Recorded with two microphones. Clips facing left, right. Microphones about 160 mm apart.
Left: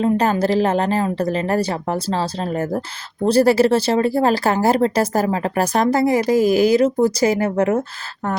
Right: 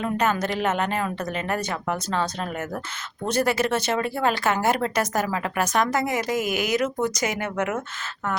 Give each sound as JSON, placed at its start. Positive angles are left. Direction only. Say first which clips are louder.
{"t": 0.0, "sound": "speech", "louder": "left 7 dB", "side_deg": 30}